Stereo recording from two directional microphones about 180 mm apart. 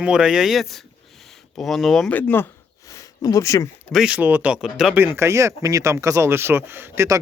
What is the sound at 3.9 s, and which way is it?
Speech, 5° right (ahead or behind).